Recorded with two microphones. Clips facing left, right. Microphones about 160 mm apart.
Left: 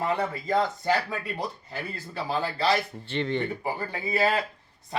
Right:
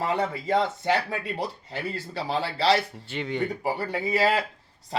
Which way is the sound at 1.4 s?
75° right (ahead or behind).